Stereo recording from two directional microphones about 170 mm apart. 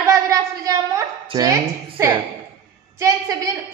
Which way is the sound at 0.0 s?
20° right (ahead or behind).